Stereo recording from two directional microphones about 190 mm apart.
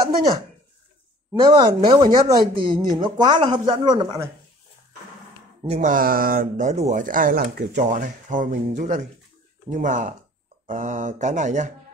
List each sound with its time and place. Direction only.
1.6 s speech: 25° right (ahead or behind)
2.6 s speech: 50° right (ahead or behind)
2.9 s speech: 25° right (ahead or behind)
5.6 s speech: 35° right (ahead or behind)